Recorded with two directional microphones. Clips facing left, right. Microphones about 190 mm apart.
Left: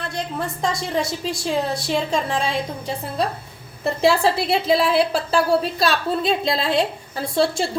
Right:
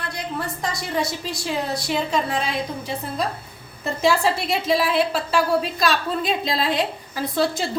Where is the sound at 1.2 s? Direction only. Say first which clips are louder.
Left 4 dB; 25° left (ahead or behind).